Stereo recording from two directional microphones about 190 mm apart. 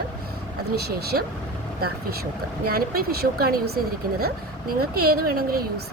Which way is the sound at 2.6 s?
50° right (ahead or behind).